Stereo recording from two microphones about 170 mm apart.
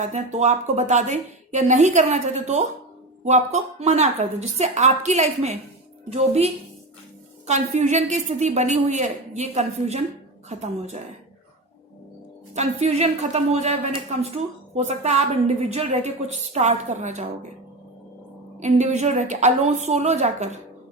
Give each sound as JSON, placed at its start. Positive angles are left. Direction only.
{"t": 0.0, "sound": "a woman's voice", "side_deg": -45}
{"t": 12.5, "sound": "a woman's voice", "side_deg": -40}
{"t": 18.6, "sound": "a woman's voice", "side_deg": -40}